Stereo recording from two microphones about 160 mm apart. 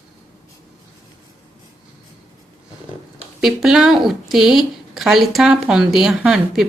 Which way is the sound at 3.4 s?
5° right (ahead or behind).